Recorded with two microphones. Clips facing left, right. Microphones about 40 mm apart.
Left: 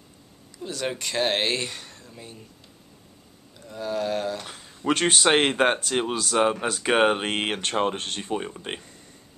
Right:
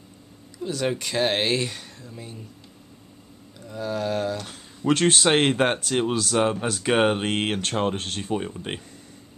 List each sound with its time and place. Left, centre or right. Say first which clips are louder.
0.6 s speech: right 4 dB; centre
3.5 s speech: even; centre